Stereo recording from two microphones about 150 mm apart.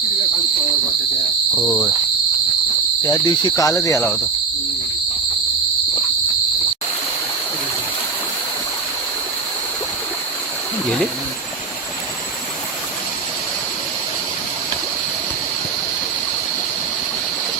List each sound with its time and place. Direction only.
1.5 s speech: 20° left (ahead or behind)
3.0 s speech: 25° left (ahead or behind)